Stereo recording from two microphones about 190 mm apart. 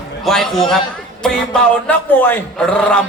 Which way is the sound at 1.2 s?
5° left (ahead or behind).